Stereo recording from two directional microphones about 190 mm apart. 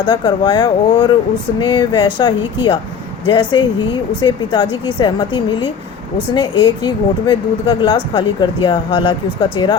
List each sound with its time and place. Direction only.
0.0 s speech: 25° left (ahead or behind)